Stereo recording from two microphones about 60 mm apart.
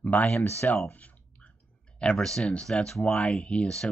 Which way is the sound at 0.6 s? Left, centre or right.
Left.